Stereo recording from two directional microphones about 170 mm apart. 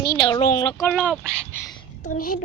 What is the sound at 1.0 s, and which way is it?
Speech, 5° left (ahead or behind).